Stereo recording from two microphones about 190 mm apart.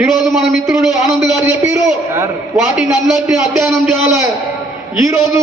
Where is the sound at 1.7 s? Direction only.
15° right (ahead or behind).